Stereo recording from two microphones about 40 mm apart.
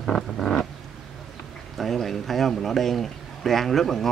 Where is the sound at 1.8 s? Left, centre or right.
Centre.